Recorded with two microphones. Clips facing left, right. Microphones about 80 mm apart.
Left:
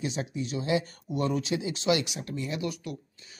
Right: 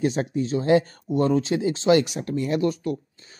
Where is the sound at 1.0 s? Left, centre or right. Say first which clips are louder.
Right 8 dB; right.